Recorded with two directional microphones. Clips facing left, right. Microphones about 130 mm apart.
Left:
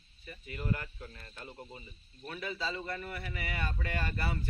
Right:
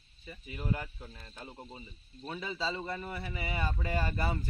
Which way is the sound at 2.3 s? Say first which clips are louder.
Right 2 dB; 25° right (ahead or behind).